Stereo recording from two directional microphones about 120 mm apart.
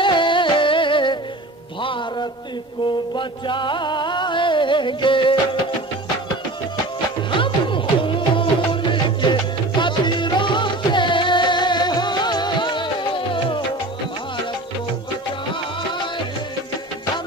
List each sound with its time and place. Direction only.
0.0 s music: 45° left (ahead or behind)
7.2 s music: 45° left (ahead or behind)